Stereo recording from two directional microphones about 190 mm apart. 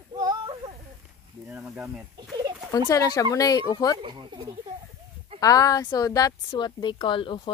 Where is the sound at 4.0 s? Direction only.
25° right (ahead or behind).